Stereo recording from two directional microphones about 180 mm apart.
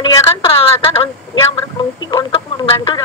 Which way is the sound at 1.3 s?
30° left (ahead or behind).